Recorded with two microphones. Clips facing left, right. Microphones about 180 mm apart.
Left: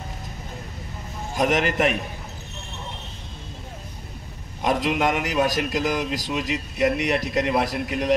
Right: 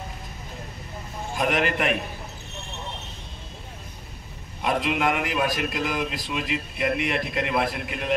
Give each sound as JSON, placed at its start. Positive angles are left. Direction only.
{"t": 1.3, "sound": "a man's voice", "side_deg": 40}
{"t": 4.6, "sound": "a man's voice", "side_deg": 40}